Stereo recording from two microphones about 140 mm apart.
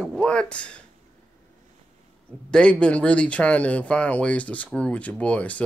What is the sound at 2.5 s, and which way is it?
Speech, 5° left (ahead or behind).